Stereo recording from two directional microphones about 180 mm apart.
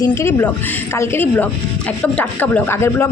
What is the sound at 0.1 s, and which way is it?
A woman's voice, 15° left (ahead or behind).